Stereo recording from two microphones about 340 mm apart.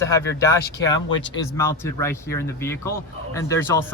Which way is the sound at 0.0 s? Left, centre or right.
Centre.